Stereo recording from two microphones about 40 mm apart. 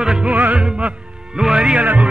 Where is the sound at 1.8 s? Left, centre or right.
Right.